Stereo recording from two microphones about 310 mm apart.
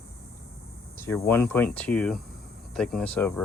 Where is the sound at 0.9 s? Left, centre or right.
Centre.